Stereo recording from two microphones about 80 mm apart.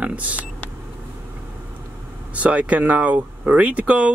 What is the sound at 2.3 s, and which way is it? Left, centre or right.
Speech, centre.